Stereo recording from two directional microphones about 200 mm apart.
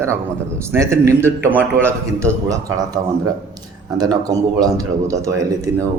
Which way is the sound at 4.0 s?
20° right (ahead or behind).